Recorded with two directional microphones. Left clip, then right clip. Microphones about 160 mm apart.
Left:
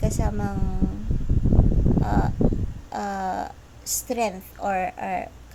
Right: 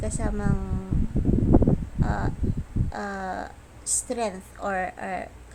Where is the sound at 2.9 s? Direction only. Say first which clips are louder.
Left 5 dB; 15° left (ahead or behind).